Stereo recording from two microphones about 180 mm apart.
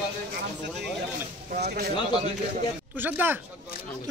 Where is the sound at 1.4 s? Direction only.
60° right (ahead or behind).